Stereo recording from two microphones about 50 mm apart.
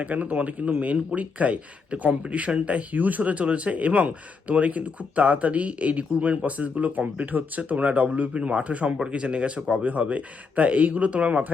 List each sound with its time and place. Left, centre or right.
0.0 s speech: right